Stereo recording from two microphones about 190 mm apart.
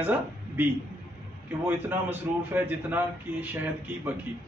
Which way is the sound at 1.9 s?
10° right (ahead or behind).